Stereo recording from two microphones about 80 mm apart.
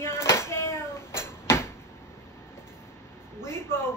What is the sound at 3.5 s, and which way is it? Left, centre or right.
Speech, left.